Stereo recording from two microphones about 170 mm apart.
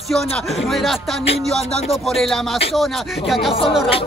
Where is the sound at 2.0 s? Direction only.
Centre (ahead or behind).